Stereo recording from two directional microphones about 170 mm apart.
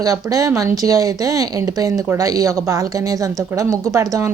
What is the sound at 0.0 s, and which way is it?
Speech, 20° right (ahead or behind).